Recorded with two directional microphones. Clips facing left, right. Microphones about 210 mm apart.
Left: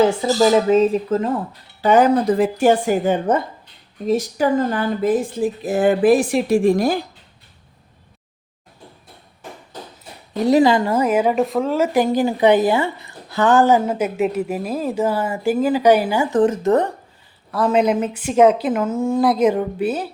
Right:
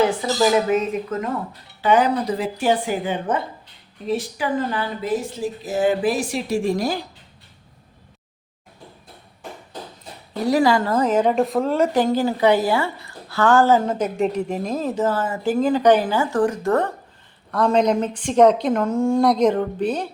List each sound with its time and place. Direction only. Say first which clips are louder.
0.0 s speech: left 3 dB; 25° left (ahead or behind)
1.8 s speech: left 4 dB; 45° left (ahead or behind)
10.4 s a woman's voice: left 3 dB; 20° left (ahead or behind)
17.5 s a woman's voice: left 1 dB; 5° left (ahead or behind)